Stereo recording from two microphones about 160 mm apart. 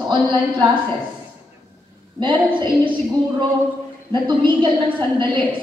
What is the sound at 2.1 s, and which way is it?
Speech, 30° right (ahead or behind).